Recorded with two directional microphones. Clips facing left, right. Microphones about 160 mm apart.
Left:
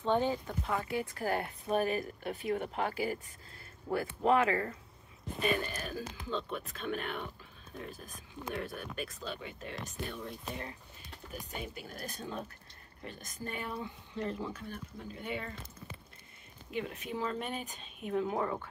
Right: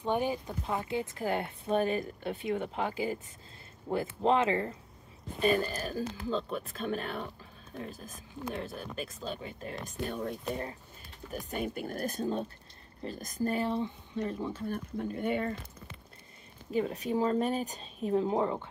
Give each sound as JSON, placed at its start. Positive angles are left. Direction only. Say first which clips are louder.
{"t": 0.0, "sound": "speech", "louder": "even", "side_deg": -15}
{"t": 5.4, "sound": "speech", "louder": "right 5 dB", "side_deg": -35}
{"t": 8.5, "sound": "speech", "louder": "right 1 dB", "side_deg": -30}
{"t": 14.1, "sound": "speech", "louder": "right 2 dB", "side_deg": -15}
{"t": 14.7, "sound": "speech", "louder": "right 9 dB", "side_deg": -50}
{"t": 16.7, "sound": "speech", "louder": "right 8 dB", "side_deg": -35}